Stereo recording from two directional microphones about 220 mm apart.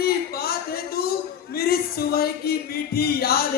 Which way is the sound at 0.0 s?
45° left (ahead or behind).